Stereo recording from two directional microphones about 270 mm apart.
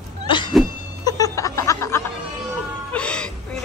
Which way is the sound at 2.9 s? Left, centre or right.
Centre.